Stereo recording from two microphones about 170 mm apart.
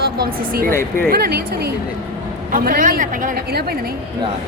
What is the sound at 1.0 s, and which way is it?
Speech, 65° right (ahead or behind).